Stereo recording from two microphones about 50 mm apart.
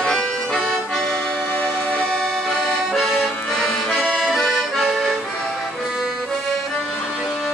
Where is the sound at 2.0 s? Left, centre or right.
Centre.